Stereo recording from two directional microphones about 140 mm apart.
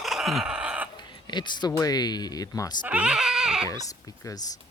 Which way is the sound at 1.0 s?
30° left (ahead or behind).